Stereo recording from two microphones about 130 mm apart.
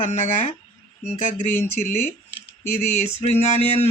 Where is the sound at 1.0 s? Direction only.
75° left (ahead or behind).